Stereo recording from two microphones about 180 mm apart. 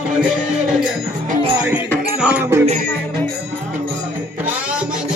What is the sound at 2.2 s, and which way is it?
Music, 10° right (ahead or behind).